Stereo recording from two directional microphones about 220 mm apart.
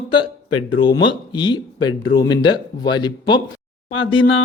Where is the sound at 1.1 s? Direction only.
20° left (ahead or behind).